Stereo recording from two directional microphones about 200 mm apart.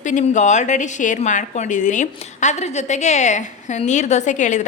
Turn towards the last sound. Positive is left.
turn(degrees=35)  # may be behind; listen again after turning